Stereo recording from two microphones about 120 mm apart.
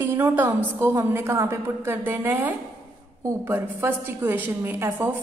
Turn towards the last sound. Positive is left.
turn(degrees=-15)  # may be behind; listen again after turning